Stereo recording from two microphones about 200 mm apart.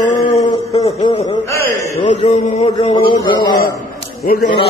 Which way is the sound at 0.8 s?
30° left (ahead or behind).